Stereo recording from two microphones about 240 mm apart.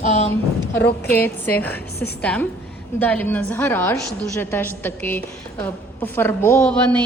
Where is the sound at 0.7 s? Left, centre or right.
Centre.